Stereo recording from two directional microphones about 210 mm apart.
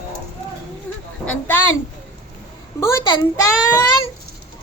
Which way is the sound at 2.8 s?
15° left (ahead or behind).